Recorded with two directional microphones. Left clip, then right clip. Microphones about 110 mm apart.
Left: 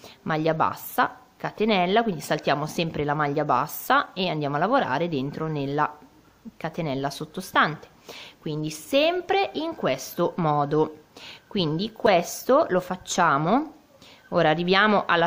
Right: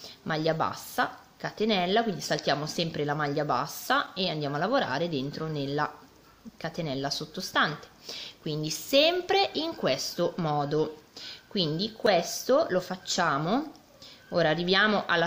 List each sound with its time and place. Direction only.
0.0 s a woman's voice: 25° left (ahead or behind)
7.1 s speech: 35° left (ahead or behind)
7.5 s a woman's voice: 25° left (ahead or behind)
9.9 s a woman's voice: 30° left (ahead or behind)